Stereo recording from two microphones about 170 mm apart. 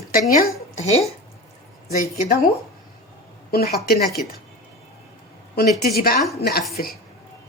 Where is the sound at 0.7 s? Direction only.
40° left (ahead or behind).